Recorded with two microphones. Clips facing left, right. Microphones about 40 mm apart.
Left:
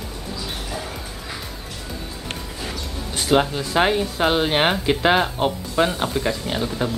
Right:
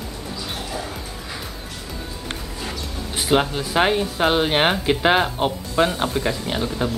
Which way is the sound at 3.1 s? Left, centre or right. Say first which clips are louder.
Left 1 dB; centre.